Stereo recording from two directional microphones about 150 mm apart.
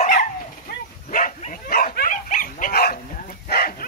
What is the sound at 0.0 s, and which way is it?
Dog, 55° left (ahead or behind).